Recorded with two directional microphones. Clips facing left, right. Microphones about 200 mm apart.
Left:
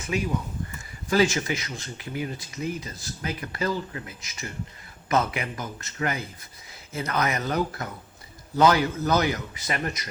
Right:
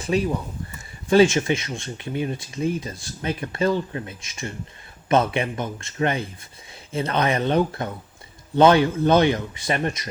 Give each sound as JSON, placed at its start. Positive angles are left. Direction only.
{"t": 0.0, "sound": "speech", "side_deg": -35}